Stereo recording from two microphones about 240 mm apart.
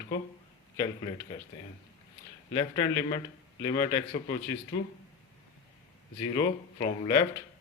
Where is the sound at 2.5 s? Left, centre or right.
Centre.